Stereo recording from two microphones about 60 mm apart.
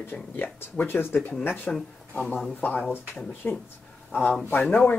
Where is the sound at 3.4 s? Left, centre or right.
Left.